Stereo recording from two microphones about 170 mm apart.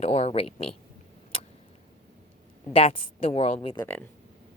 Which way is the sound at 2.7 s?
30° left (ahead or behind).